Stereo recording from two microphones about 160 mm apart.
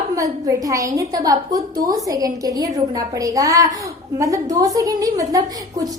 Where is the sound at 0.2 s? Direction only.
20° right (ahead or behind).